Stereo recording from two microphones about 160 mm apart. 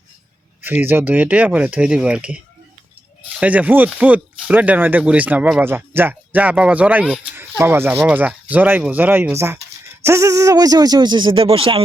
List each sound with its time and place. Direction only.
0.6 s speech: 10° right (ahead or behind)
3.4 s speech: 10° right (ahead or behind); by 11.8 s 35° right (ahead or behind)